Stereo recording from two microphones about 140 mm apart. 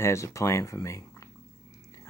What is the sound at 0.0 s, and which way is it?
Speech, 20° left (ahead or behind).